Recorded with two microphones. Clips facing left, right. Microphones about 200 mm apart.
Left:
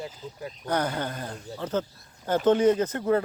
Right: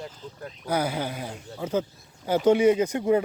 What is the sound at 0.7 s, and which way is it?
Speech, 10° right (ahead or behind).